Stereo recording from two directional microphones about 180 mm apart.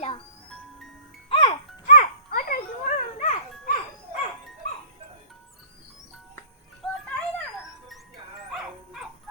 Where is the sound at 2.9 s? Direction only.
40° left (ahead or behind).